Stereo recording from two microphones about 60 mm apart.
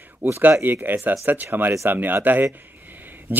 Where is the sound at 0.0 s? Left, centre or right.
Right.